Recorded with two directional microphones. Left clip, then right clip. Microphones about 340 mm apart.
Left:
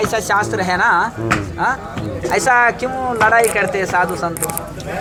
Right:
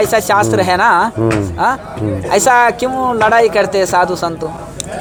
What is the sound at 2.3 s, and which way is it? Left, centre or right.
Speech, right.